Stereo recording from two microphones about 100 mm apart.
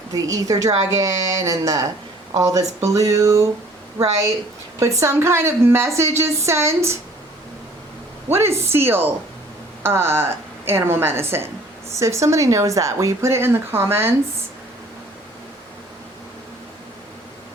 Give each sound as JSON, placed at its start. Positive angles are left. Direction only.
{"t": 0.1, "sound": "speech", "side_deg": -35}
{"t": 4.8, "sound": "speech", "side_deg": -30}
{"t": 8.3, "sound": "speech", "side_deg": -25}